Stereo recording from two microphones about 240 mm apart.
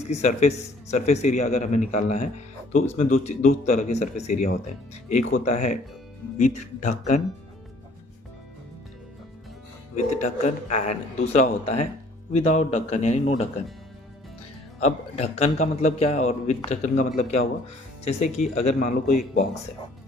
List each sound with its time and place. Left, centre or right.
0.0 s a man's voice: left
9.9 s a man's voice: left
14.8 s a man's voice: left
18.5 s a man's voice: left